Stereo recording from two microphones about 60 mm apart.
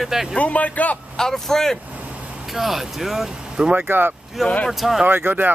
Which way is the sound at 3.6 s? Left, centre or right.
Centre.